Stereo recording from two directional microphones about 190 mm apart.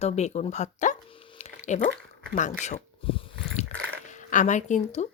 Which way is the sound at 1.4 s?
40° left (ahead or behind).